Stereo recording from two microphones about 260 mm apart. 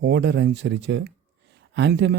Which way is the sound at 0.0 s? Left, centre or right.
Right.